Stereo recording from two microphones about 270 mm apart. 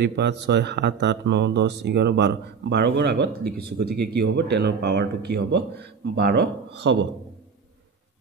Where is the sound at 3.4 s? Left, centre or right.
Right.